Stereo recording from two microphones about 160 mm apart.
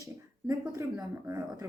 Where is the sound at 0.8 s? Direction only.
20° right (ahead or behind).